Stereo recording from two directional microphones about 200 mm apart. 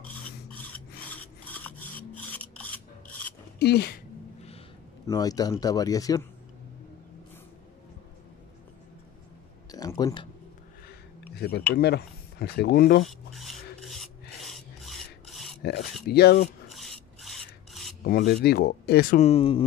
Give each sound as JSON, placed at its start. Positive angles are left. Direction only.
{"t": 1.1, "sound": "filing", "side_deg": 10}
{"t": 3.5, "sound": "speech", "side_deg": 55}
{"t": 5.0, "sound": "speech", "side_deg": 20}
{"t": 9.7, "sound": "a sound", "side_deg": 20}
{"t": 11.3, "sound": "speech", "side_deg": 50}
{"t": 13.3, "sound": "filing", "side_deg": 0}
{"t": 15.6, "sound": "speech", "side_deg": 55}
{"t": 16.6, "sound": "filing", "side_deg": 0}
{"t": 18.0, "sound": "speech", "side_deg": 45}
{"t": 18.5, "sound": "speech", "side_deg": 55}
{"t": 19.1, "sound": "speech", "side_deg": 30}